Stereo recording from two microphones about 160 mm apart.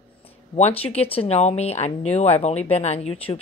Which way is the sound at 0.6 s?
40° left (ahead or behind).